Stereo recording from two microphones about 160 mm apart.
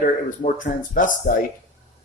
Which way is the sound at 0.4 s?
55° left (ahead or behind).